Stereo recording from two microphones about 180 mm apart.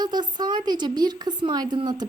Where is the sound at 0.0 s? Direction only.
25° right (ahead or behind).